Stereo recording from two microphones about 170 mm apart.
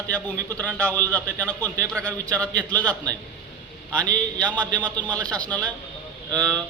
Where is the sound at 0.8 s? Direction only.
10° left (ahead or behind).